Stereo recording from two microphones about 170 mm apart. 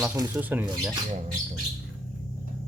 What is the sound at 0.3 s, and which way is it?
Speech, 10° right (ahead or behind).